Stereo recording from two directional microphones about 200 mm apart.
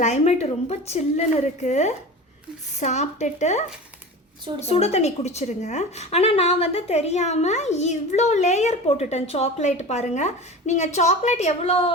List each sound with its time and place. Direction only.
0.0 s a woman's voice: 35° left (ahead or behind)
4.6 s a woman's voice: 30° left (ahead or behind)